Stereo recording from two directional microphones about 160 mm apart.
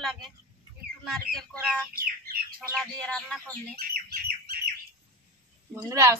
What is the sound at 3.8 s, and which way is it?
Bird, 70° right (ahead or behind).